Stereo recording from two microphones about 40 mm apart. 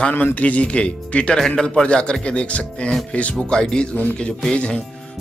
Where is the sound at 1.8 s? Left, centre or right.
Left.